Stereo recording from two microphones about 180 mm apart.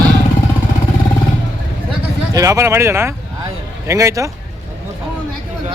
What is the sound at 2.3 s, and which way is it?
A man's voice, 20° right (ahead or behind).